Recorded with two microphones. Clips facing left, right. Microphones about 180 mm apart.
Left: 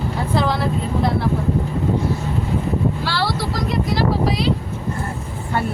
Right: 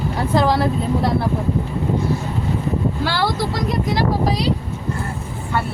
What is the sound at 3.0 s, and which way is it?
Speech, 50° right (ahead or behind).